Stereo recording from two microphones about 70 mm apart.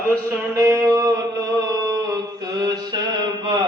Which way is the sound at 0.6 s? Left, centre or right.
Right.